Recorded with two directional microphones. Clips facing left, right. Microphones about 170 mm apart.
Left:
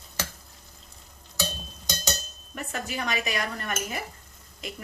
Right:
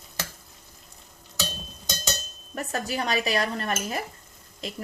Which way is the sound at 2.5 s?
35° right (ahead or behind).